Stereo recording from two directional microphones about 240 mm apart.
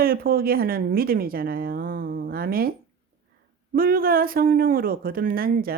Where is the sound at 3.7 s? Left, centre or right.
Right.